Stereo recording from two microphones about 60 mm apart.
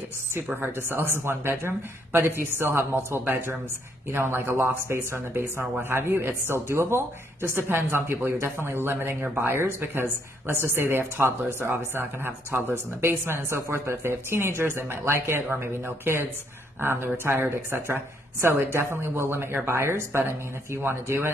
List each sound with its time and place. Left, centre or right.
0.6 s a woman's voice: right